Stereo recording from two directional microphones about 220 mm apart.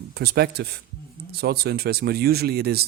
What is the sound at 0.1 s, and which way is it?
Speech, 45° right (ahead or behind).